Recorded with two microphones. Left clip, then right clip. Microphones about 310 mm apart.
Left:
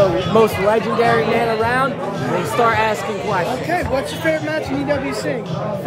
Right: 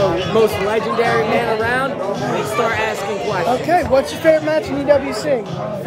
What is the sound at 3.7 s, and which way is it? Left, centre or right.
A man's voice, centre.